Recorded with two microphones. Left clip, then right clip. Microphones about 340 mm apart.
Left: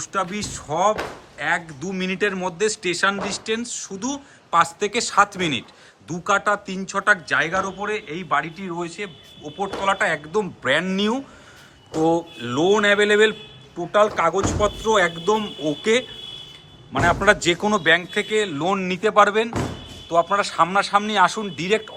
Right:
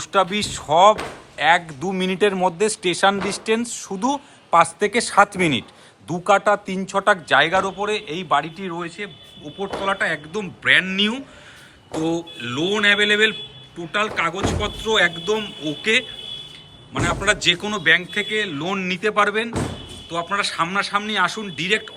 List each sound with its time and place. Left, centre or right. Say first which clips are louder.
0.0 s a man's voice: right 6 dB; centre
9.0 s a man's voice: even; centre